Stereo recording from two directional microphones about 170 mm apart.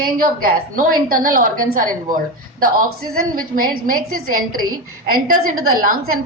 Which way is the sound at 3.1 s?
60° right (ahead or behind).